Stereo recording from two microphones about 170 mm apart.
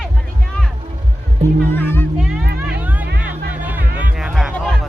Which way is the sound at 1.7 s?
10° left (ahead or behind).